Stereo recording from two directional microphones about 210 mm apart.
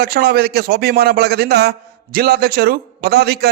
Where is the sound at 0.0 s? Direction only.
50° right (ahead or behind).